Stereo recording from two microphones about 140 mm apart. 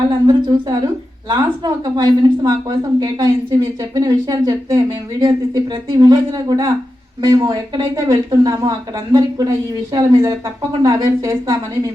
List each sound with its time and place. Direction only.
0.3 s a woman's voice: 30° right (ahead or behind)